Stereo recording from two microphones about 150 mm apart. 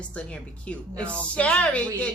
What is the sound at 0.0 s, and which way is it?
A woman's voice, 10° left (ahead or behind).